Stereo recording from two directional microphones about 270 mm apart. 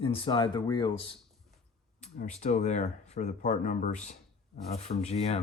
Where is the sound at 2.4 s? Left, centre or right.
Left.